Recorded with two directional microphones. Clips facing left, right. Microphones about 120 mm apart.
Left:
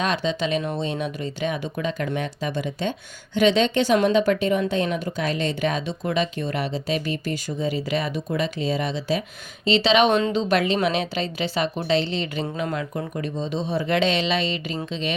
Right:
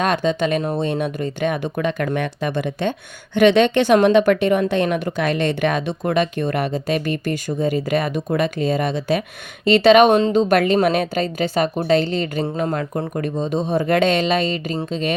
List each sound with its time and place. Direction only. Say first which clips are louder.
0.0 s a woman's voice: right 5 dB; 50° right (ahead or behind)